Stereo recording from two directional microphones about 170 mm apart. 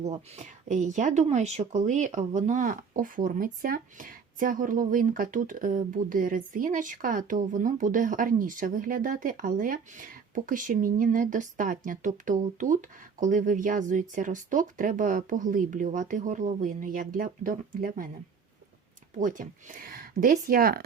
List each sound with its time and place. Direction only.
0.0 s speech: 40° right (ahead or behind)
19.2 s speech: 50° right (ahead or behind)